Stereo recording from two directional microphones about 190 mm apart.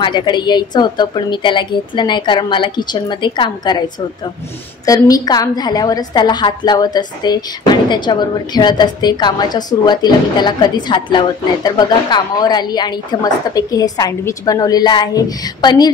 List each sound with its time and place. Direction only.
0.0 s a woman's voice: 25° left (ahead or behind)